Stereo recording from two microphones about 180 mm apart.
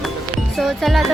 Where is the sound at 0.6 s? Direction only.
Centre (ahead or behind).